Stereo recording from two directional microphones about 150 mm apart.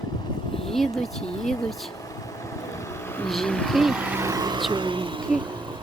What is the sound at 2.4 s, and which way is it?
Vehicle, 20° left (ahead or behind).